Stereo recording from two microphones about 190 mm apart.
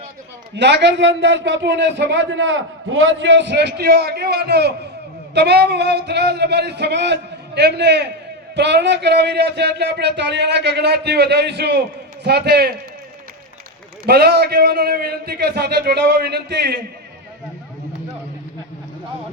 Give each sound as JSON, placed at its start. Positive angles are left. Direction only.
{"t": 0.5, "sound": "speech", "side_deg": -65}
{"t": 14.1, "sound": "speech", "side_deg": -60}